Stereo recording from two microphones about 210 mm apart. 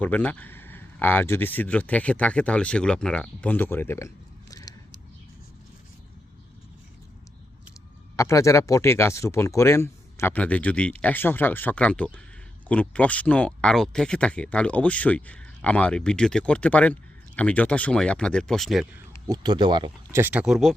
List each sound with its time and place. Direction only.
0.0 s speech: 5° left (ahead or behind)
4.5 s a sound: 15° left (ahead or behind)
8.1 s speech: 15° left (ahead or behind); by 19.0 s centre (ahead or behind)
19.3 s speech: 20° right (ahead or behind); by 20.7 s centre (ahead or behind)